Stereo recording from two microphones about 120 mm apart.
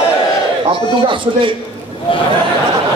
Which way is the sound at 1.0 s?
45° right (ahead or behind).